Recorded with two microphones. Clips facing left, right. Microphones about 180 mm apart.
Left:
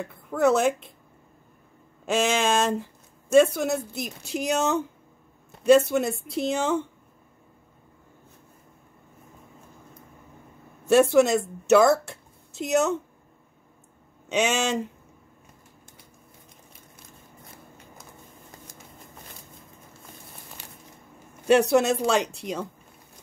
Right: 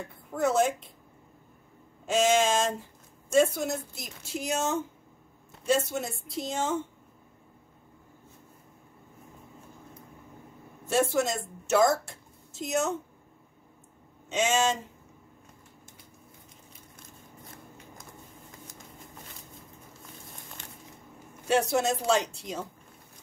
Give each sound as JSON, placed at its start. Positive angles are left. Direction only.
{"t": 0.3, "sound": "speech", "side_deg": 65}
{"t": 2.0, "sound": "a woman's voice", "side_deg": 70}
{"t": 10.9, "sound": "a woman's voice", "side_deg": 70}
{"t": 14.3, "sound": "speech", "side_deg": 70}
{"t": 21.5, "sound": "a woman's voice", "side_deg": 70}